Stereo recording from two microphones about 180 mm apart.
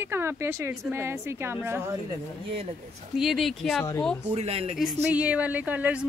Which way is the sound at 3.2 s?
Centre (ahead or behind).